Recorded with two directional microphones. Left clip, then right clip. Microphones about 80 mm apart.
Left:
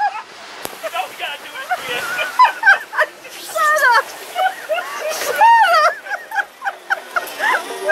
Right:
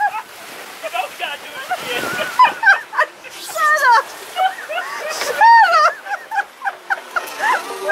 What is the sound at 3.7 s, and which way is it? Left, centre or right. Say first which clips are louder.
Fowl: right 1 dB; centre.